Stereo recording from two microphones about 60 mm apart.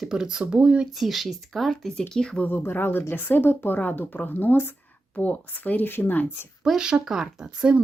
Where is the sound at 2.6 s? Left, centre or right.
Left.